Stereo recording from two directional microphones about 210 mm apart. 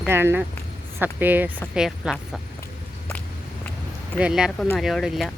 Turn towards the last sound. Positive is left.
turn(degrees=0)  # may be behind; listen again after turning